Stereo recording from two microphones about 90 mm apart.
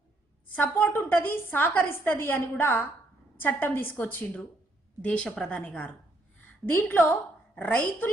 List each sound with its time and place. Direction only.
0.5 s a woman's voice: 20° left (ahead or behind)